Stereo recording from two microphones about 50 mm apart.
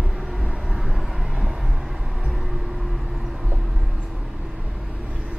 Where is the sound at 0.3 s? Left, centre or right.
Centre.